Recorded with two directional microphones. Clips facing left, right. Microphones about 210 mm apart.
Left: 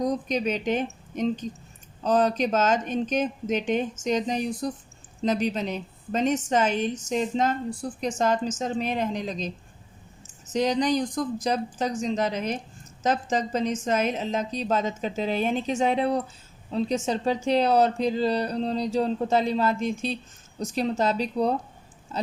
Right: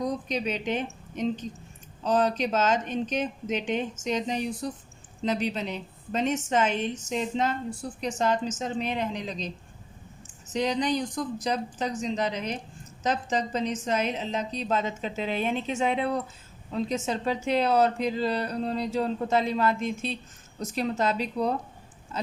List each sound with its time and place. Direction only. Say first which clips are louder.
0.0 s a woman's voice: left 4 dB; 45° left (ahead or behind)
10.5 s a woman's voice: left 3 dB; 45° left (ahead or behind)